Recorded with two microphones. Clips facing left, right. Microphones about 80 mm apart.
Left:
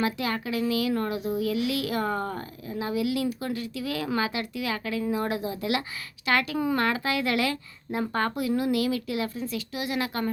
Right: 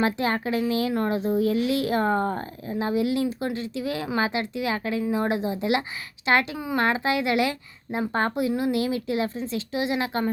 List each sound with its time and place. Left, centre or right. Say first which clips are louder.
0.0 s speech: right 4 dB; right